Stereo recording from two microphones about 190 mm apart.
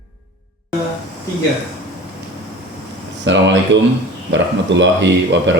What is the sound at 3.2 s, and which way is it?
Speech, 70° right (ahead or behind).